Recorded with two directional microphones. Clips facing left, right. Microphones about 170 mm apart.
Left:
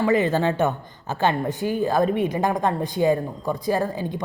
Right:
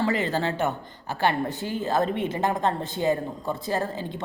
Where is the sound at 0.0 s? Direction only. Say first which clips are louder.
Left 5 dB; 20° left (ahead or behind).